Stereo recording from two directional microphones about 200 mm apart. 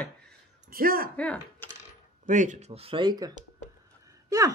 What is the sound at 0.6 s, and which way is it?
Speech, 45° right (ahead or behind).